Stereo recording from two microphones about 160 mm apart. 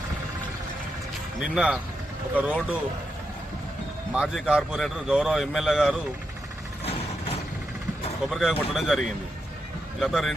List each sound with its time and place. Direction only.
1.4 s a man's voice: 5° right (ahead or behind)
4.1 s a man's voice: 5° right (ahead or behind)
6.8 s vehicle: 40° left (ahead or behind)
8.3 s a man's voice: centre (ahead or behind)